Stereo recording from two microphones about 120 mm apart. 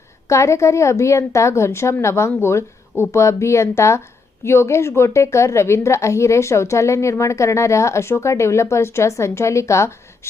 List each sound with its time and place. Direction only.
0.3 s a woman's voice: 25° left (ahead or behind)